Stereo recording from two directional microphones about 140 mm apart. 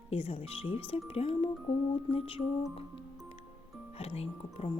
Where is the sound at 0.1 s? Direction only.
45° left (ahead or behind).